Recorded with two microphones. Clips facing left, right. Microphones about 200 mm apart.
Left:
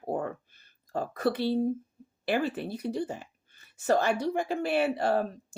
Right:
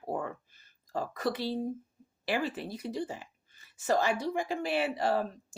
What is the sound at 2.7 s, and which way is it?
A woman's voice, 60° left (ahead or behind).